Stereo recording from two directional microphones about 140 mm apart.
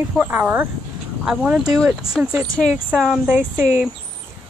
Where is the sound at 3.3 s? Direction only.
15° right (ahead or behind).